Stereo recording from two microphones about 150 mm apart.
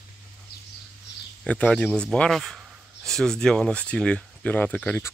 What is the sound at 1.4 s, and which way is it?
A man's voice, 10° left (ahead or behind).